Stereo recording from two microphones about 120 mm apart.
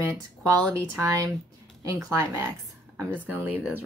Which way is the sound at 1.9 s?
25° right (ahead or behind).